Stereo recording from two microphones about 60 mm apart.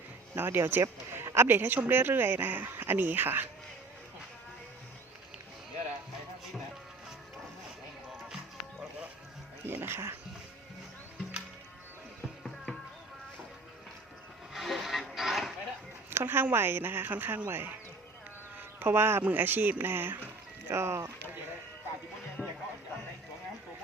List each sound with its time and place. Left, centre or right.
0.3 s a man's voice: right
9.6 s speech: right
14.5 s a sound: centre
16.0 s speech: right
18.8 s speech: right
20.7 s speech: right
22.4 s music: centre